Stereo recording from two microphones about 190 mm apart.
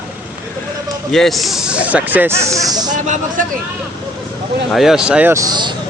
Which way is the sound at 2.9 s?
40° right (ahead or behind).